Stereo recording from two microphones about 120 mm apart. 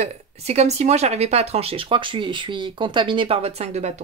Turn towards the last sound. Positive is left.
turn(degrees=-65)  # may be behind; listen again after turning